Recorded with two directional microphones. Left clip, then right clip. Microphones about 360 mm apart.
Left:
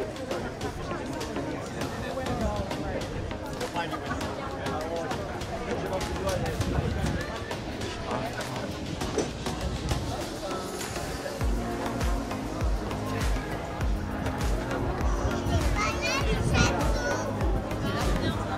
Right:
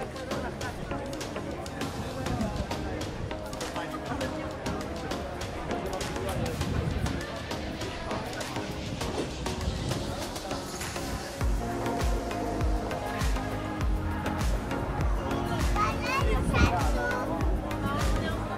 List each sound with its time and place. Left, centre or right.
15.8 s children playing: centre